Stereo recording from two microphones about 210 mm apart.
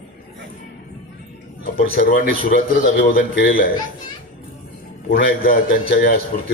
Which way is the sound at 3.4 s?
45° left (ahead or behind).